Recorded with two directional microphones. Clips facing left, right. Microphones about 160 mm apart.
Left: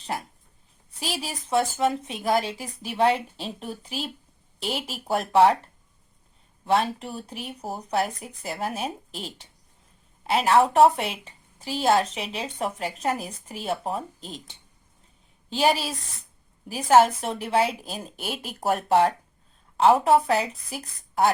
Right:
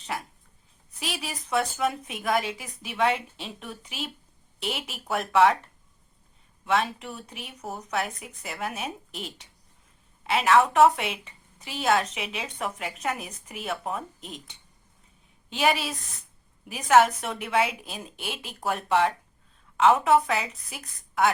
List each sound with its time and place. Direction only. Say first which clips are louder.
0.9 s a woman's voice: left 2 dB; 35° left (ahead or behind)
6.7 s a woman's voice: left 3 dB; 35° left (ahead or behind)